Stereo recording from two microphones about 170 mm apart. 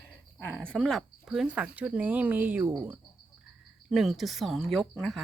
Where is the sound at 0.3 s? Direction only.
10° left (ahead or behind).